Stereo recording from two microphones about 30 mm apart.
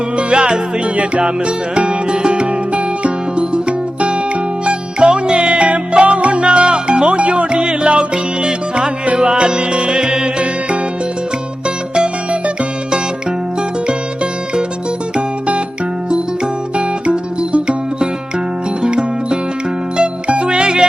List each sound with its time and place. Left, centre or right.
0.2 s music: right
1.7 s music: right
16.7 s music: right